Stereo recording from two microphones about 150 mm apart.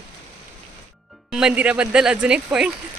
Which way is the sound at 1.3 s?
5° right (ahead or behind).